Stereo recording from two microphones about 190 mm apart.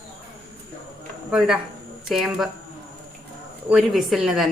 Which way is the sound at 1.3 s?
5° right (ahead or behind).